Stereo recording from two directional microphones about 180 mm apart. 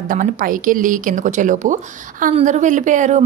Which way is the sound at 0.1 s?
50° right (ahead or behind).